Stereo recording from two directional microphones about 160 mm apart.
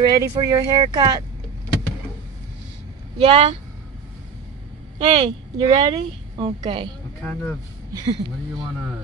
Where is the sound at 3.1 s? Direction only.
35° right (ahead or behind).